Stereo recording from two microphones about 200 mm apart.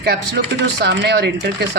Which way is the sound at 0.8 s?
60° right (ahead or behind).